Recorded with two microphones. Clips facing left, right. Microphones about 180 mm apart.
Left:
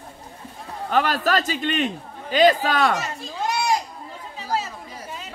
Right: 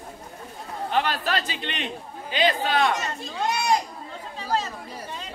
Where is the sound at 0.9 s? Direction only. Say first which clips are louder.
Left 4 dB; 45° left (ahead or behind).